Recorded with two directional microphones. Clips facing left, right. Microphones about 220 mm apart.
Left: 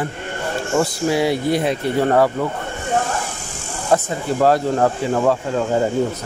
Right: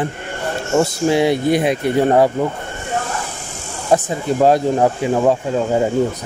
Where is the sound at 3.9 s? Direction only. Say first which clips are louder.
Right 2 dB; 20° right (ahead or behind).